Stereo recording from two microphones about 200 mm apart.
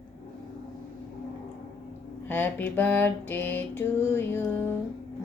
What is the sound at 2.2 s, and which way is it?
Speech, 10° left (ahead or behind).